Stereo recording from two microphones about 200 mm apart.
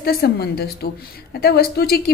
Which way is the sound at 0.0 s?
50° left (ahead or behind).